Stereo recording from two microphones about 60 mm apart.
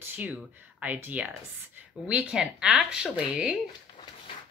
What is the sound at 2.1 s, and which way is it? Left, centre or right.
Speech, centre.